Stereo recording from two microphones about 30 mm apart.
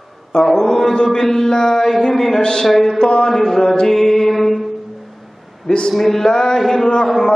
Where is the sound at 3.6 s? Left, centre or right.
Left.